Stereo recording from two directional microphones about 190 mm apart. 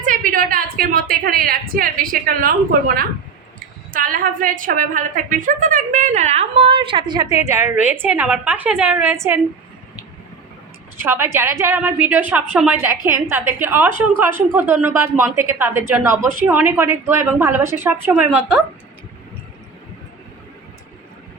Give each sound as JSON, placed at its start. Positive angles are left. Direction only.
{"t": 0.0, "sound": "a woman's voice", "side_deg": -45}
{"t": 11.0, "sound": "a woman's voice", "side_deg": -10}